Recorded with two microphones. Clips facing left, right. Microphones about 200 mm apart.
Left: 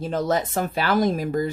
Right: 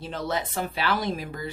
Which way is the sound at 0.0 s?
45° left (ahead or behind).